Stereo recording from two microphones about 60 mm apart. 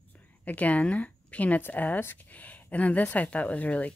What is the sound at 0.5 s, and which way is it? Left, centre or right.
A woman's voice, left.